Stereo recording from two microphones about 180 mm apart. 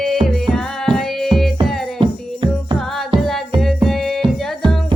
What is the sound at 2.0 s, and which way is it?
Music, 25° right (ahead or behind).